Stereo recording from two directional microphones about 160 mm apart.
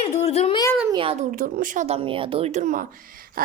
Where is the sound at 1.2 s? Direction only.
55° right (ahead or behind).